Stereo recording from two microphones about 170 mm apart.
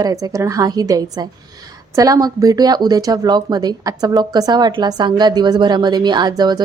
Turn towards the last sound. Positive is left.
turn(degrees=-25)  # may be behind; listen again after turning